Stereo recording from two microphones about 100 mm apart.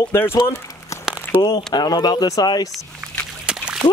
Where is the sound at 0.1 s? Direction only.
25° left (ahead or behind).